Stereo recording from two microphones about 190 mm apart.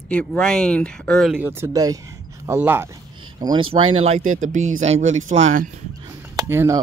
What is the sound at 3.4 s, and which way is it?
Speech, 20° right (ahead or behind).